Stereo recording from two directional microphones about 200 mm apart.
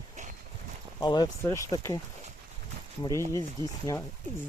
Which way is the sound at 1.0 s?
20° left (ahead or behind).